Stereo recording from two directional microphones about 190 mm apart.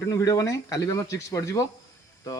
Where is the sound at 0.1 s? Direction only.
20° left (ahead or behind).